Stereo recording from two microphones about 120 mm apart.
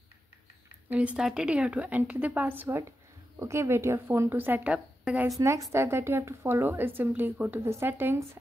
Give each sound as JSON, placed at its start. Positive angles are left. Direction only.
{"t": 0.8, "sound": "a woman's voice", "side_deg": -10}
{"t": 5.4, "sound": "a woman's voice", "side_deg": -25}